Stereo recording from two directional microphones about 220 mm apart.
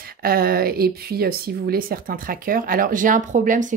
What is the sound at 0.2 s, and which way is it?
Speech, 40° right (ahead or behind).